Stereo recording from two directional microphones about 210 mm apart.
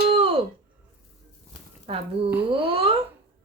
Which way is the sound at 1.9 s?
25° right (ahead or behind).